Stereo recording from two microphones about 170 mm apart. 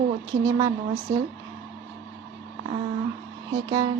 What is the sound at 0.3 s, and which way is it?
Speech, 20° right (ahead or behind).